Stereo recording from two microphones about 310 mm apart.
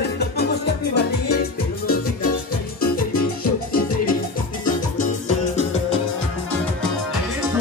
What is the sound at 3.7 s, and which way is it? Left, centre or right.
Music, left.